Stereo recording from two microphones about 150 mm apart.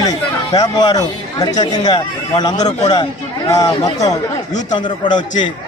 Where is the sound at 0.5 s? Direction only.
25° left (ahead or behind).